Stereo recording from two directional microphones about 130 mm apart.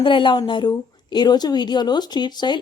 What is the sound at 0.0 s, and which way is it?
Speech, 40° left (ahead or behind).